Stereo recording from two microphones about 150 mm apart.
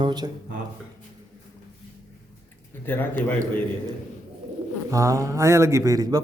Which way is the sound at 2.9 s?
15° left (ahead or behind).